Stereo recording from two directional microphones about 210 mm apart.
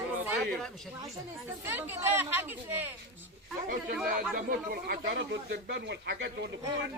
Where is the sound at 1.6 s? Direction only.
10° right (ahead or behind).